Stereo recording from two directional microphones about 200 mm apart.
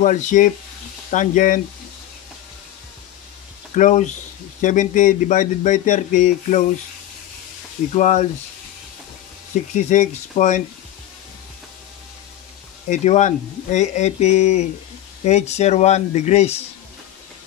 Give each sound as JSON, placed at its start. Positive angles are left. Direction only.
{"t": 0.0, "sound": "speech", "side_deg": 40}
{"t": 3.7, "sound": "speech", "side_deg": 40}
{"t": 7.9, "sound": "speech", "side_deg": 35}
{"t": 9.8, "sound": "speech", "side_deg": 35}
{"t": 12.9, "sound": "speech", "side_deg": 35}